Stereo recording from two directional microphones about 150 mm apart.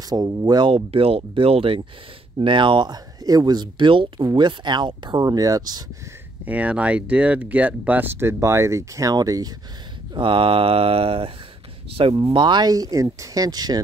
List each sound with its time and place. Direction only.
0.0 s speech: 25° right (ahead or behind)
6.4 s speech: 10° right (ahead or behind); by 13.7 s 25° right (ahead or behind)